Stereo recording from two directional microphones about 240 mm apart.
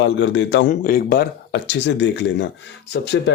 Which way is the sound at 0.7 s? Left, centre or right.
Left.